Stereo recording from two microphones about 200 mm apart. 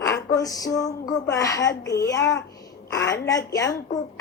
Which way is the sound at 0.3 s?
15° left (ahead or behind).